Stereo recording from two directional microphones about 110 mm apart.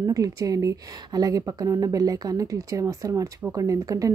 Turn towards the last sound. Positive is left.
turn(degrees=-30)  # may be behind; listen again after turning